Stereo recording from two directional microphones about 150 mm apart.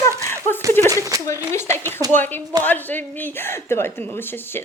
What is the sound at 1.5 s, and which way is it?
Speech, 15° left (ahead or behind).